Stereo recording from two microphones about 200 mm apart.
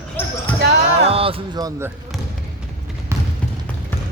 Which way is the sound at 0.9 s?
30° right (ahead or behind).